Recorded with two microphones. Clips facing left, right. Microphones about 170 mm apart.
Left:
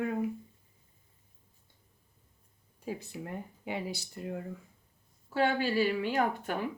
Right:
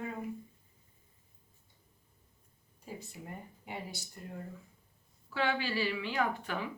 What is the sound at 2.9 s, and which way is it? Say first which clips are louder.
Speech: left 7 dB; 90° left.